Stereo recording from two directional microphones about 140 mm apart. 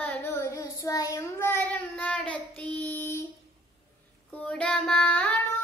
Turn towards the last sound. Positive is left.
turn(degrees=5)  # may be behind; listen again after turning